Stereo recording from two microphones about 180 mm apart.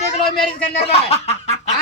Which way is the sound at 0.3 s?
55° left (ahead or behind).